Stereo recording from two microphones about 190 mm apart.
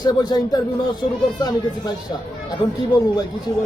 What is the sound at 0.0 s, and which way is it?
Speech, 20° left (ahead or behind).